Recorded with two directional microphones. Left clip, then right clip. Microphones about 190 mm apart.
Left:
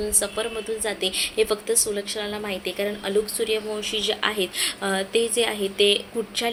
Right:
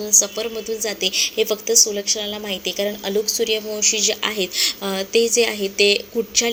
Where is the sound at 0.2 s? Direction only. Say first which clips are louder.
Right 5 dB; 25° right (ahead or behind).